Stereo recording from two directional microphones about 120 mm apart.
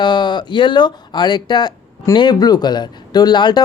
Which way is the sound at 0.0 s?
40° left (ahead or behind).